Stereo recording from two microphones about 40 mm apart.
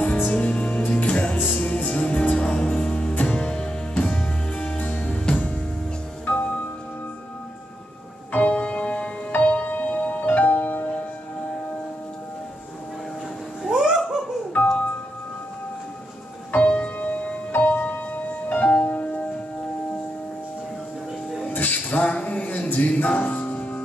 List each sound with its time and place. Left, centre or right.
0.2 s music: left
3.2 s music: left
3.4 s music: left
4.0 s music: left
8.3 s music: left
13.7 s music: centre
14.5 s music: left
16.5 s music: left
17.5 s music: left
21.5 s music: left